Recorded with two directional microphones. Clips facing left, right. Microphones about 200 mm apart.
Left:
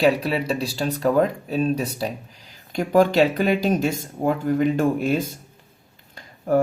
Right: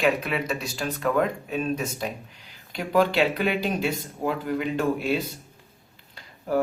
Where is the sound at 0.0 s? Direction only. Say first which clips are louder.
Left 4 dB; 35° left (ahead or behind).